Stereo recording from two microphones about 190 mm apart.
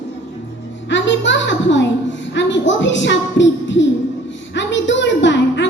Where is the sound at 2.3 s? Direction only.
75° left (ahead or behind).